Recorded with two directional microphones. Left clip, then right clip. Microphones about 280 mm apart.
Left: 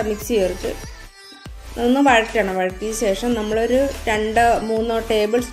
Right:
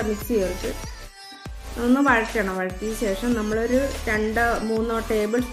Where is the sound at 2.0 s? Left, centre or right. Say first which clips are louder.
Left 6 dB; centre.